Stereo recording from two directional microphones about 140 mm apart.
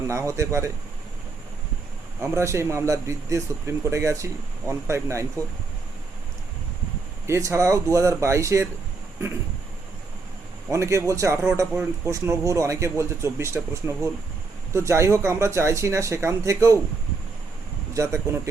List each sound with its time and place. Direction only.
0.1 s speech: 20° right (ahead or behind)
2.2 s speech: 20° right (ahead or behind)
7.3 s speech: 20° right (ahead or behind)
10.7 s speech: 20° right (ahead or behind)
17.9 s speech: 20° right (ahead or behind)